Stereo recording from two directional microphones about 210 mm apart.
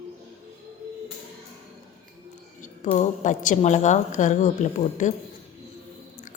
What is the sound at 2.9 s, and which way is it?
A woman's voice, 35° left (ahead or behind).